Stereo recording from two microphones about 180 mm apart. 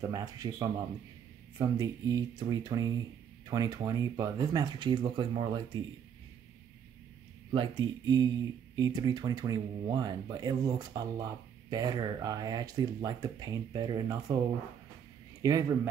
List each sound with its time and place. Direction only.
0.0 s speech: 20° right (ahead or behind)
7.5 s speech: 25° right (ahead or behind)
15.4 s speech: 20° right (ahead or behind)